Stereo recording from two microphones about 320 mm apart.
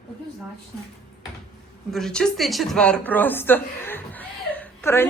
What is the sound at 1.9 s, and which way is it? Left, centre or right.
Speech, centre.